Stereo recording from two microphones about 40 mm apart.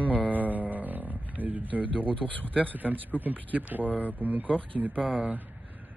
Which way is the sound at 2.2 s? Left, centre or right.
Left.